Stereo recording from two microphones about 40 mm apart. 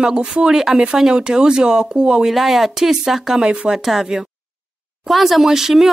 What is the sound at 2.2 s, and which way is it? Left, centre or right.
Speech, centre.